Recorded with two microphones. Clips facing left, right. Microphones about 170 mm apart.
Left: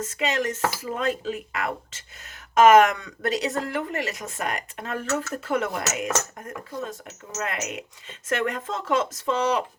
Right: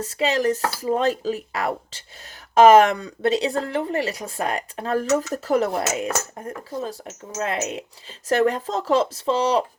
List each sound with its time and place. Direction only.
0.0 s speech: 35° right (ahead or behind)